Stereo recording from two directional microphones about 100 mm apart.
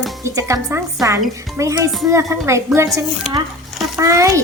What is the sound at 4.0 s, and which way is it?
Speech, 30° right (ahead or behind).